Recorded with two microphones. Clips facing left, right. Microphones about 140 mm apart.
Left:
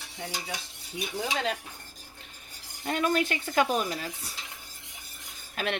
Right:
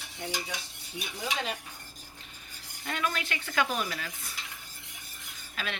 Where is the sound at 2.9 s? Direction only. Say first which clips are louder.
Left 6 dB; 40° left (ahead or behind).